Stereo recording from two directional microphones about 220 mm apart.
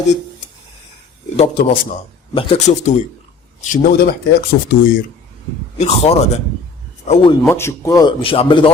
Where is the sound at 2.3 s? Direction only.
30° left (ahead or behind).